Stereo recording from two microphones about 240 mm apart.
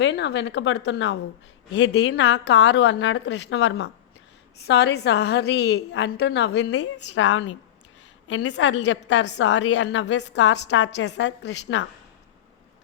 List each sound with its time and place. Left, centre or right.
0.0 s a woman's voice: left